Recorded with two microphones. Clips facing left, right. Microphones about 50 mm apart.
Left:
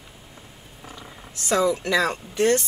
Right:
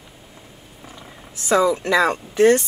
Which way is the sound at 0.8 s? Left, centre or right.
Centre.